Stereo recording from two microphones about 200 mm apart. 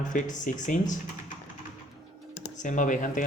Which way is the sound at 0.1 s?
40° left (ahead or behind).